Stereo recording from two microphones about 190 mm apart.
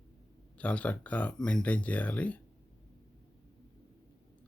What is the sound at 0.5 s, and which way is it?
Speech, 5° left (ahead or behind).